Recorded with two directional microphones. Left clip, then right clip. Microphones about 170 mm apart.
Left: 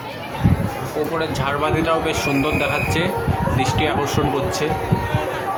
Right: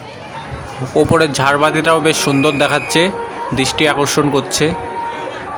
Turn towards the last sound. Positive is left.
turn(degrees=-40)  # may be behind; listen again after turning